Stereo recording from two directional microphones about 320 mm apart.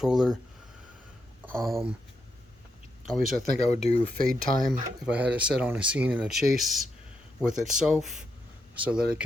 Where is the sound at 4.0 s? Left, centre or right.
Centre.